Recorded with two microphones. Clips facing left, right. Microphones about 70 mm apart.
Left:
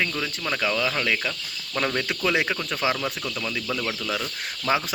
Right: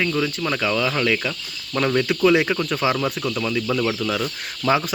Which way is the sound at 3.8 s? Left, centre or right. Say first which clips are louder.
Right 6 dB; centre.